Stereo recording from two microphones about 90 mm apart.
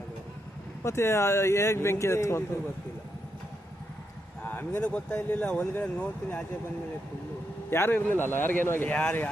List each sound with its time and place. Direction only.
0.8 s speech: 30° left (ahead or behind)
4.4 s speech: 20° left (ahead or behind)
7.7 s speech: 25° left (ahead or behind)